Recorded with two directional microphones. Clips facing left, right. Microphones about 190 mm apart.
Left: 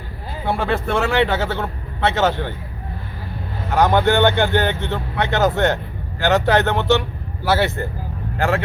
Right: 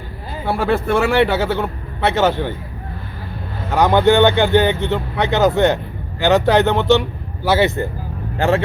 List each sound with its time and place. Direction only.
0.6 s speech: 10° right (ahead or behind)
3.8 s speech: 15° right (ahead or behind)